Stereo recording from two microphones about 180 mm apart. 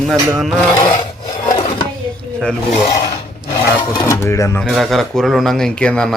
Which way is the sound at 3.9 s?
15° left (ahead or behind).